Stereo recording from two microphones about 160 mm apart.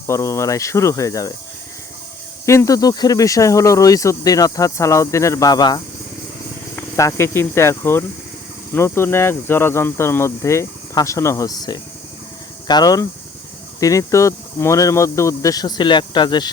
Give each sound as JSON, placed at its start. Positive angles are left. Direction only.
{"t": 0.1, "sound": "speech", "side_deg": 20}
{"t": 2.5, "sound": "speech", "side_deg": 20}